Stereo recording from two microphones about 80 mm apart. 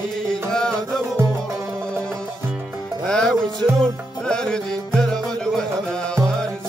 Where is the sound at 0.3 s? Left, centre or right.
Centre.